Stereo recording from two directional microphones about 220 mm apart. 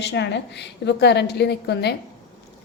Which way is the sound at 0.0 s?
50° left (ahead or behind).